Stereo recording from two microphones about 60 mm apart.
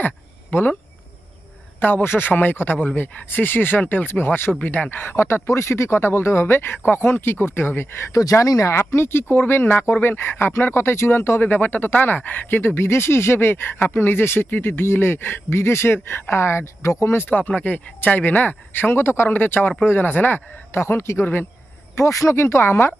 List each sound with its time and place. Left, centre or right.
0.5 s speech: left
1.8 s speech: left
5.1 s speech: left
8.1 s speech: left
8.7 s speech: left
11.4 s speech: left
17.2 s speech: left
20.8 s speech: left
21.9 s speech: left